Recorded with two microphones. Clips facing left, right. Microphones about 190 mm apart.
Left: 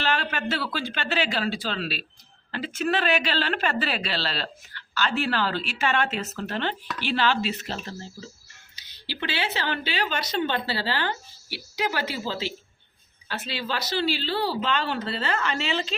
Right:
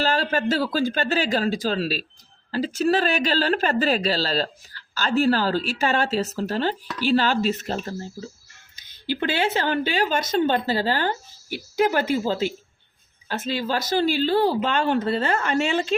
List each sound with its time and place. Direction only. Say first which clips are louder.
0.0 s speech: right 5 dB; 35° right (ahead or behind)